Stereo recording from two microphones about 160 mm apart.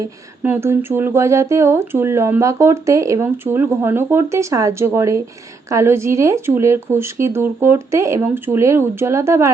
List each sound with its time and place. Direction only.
0.0 s speech: 15° right (ahead or behind)